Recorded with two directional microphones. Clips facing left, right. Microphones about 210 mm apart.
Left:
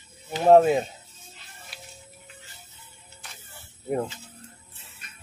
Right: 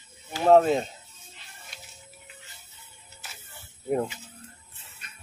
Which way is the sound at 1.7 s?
5° left (ahead or behind).